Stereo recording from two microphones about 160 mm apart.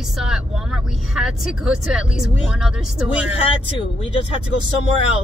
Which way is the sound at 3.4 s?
35° left (ahead or behind).